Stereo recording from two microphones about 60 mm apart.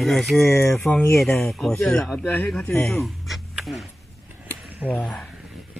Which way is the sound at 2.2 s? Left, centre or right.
Left.